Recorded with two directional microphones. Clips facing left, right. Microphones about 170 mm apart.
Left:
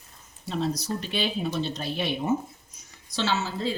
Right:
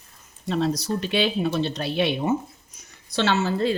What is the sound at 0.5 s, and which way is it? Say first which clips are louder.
Speech: right 4 dB; 75° right (ahead or behind).